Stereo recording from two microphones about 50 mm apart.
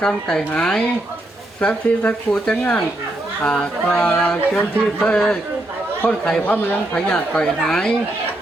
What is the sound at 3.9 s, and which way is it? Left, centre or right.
Speech, left.